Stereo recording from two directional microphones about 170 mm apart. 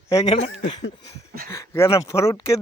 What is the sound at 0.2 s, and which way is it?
Speech, 40° left (ahead or behind).